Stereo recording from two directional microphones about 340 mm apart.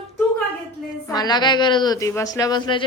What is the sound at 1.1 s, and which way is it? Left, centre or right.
A woman's voice, centre.